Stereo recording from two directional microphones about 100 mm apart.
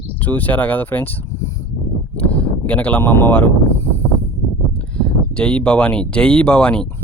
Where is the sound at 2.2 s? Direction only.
15° left (ahead or behind).